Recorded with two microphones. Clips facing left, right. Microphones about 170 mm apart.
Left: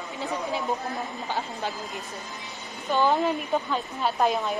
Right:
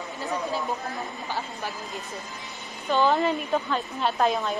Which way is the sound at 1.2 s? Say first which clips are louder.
Left 2 dB; 20° left (ahead or behind).